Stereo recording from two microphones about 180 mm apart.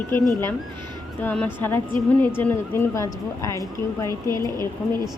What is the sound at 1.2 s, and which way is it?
A woman's voice, 10° left (ahead or behind).